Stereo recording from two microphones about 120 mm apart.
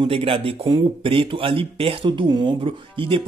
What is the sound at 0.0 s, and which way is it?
Speech, 50° right (ahead or behind).